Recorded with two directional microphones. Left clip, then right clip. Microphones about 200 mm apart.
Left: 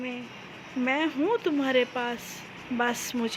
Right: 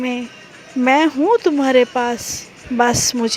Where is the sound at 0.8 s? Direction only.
45° right (ahead or behind).